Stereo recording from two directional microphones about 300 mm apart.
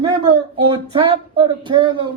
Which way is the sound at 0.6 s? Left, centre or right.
Centre.